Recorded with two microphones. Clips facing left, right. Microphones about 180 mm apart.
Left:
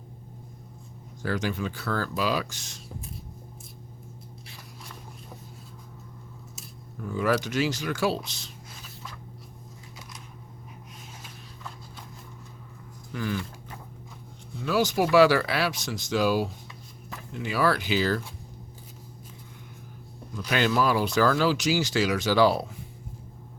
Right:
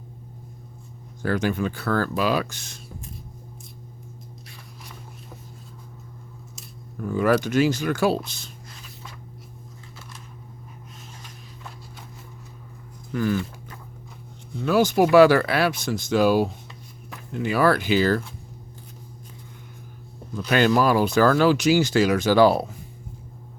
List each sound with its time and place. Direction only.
1.2 s speech: 55° right (ahead or behind)
7.1 s speech: 55° right (ahead or behind)
13.1 s speech: 45° right (ahead or behind)
14.6 s speech: 55° right (ahead or behind)
20.3 s speech: 50° right (ahead or behind)